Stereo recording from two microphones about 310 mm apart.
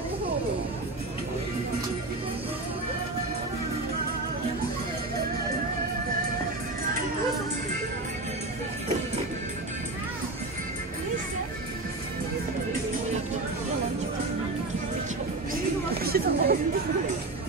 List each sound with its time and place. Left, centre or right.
16.0 s chatter: right